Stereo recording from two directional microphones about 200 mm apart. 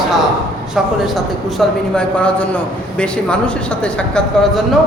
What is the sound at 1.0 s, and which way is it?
A man's voice, centre (ahead or behind).